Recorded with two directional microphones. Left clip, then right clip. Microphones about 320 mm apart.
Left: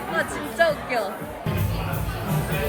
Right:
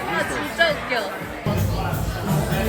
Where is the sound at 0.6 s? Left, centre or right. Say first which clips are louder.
Right 1 dB; left.